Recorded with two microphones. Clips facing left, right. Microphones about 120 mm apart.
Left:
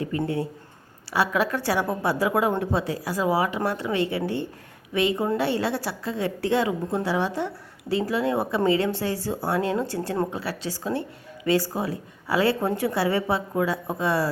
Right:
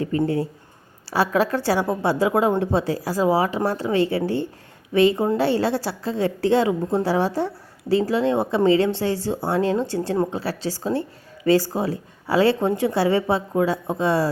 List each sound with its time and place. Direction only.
0.1 s a woman's voice: 30° right (ahead or behind)